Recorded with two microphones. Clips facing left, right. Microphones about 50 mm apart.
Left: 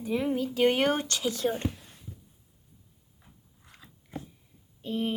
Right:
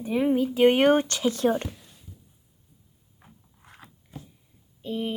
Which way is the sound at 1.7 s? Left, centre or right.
Left.